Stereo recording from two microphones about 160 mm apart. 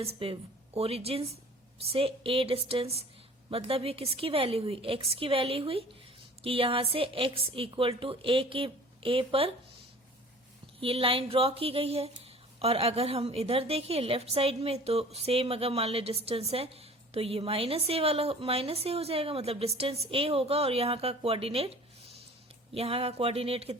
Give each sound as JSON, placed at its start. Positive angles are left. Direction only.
{"t": 0.0, "sound": "speech", "side_deg": -35}
{"t": 10.8, "sound": "speech", "side_deg": -35}